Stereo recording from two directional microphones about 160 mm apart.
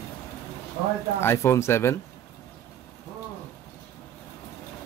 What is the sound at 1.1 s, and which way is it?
Speech, 15° left (ahead or behind).